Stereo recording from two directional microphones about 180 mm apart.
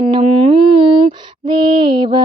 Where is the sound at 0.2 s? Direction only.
30° right (ahead or behind).